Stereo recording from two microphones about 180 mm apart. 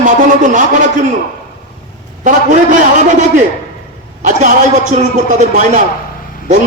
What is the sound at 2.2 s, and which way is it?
A man's voice, 45° right (ahead or behind).